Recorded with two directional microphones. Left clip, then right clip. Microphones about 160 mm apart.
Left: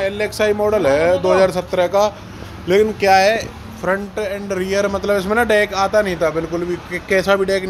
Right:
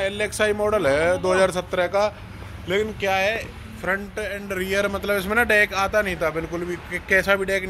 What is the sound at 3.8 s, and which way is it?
A man's voice, 15° left (ahead or behind).